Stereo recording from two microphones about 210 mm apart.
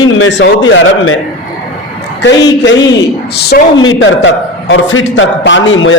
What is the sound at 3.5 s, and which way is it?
Speech, 45° left (ahead or behind).